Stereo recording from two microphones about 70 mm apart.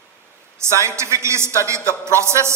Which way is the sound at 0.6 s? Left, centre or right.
Right.